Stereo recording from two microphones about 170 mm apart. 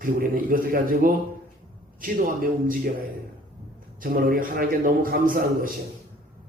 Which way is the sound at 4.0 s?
55° right (ahead or behind).